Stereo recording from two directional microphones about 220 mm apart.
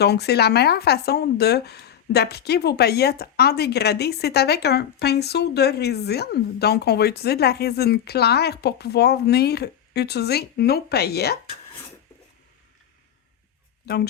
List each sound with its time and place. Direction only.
0.0 s a woman's voice: 50° left (ahead or behind)
13.8 s speech: 45° left (ahead or behind)